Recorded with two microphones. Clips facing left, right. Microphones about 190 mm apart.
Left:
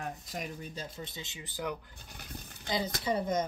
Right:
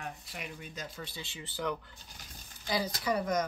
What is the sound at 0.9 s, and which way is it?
Speech, 20° left (ahead or behind).